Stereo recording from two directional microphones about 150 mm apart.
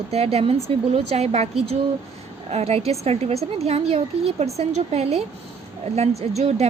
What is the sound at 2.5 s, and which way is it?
A woman's voice, 45° right (ahead or behind).